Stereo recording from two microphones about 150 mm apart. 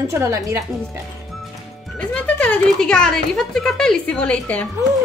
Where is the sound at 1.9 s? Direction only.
10° left (ahead or behind).